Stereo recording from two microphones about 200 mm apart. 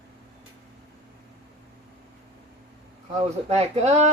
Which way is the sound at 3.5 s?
35° right (ahead or behind).